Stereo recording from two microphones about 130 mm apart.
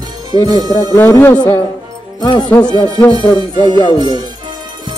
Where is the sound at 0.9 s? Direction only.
15° left (ahead or behind).